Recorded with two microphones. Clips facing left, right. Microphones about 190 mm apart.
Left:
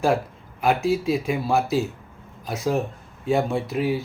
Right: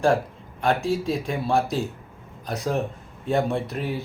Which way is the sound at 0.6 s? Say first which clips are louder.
Left 2 dB; 5° left (ahead or behind).